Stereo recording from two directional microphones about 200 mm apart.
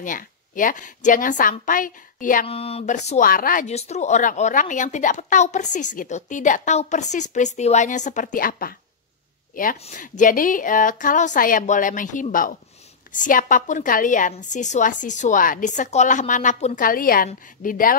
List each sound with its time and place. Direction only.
0.0 s a woman's voice: 40° left (ahead or behind)
2.4 s speech: 30° left (ahead or behind); by 8.7 s 45° left (ahead or behind)
9.8 s a woman's voice: 35° left (ahead or behind)